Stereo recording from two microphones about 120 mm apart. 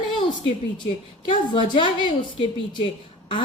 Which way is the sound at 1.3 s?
45° left (ahead or behind).